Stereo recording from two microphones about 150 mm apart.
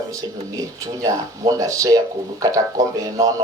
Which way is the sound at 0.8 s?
20° right (ahead or behind).